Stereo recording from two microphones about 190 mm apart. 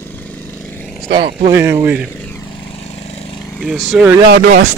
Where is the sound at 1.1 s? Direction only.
25° right (ahead or behind).